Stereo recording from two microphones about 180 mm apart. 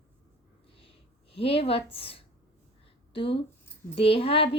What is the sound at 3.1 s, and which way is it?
Speech, 30° left (ahead or behind).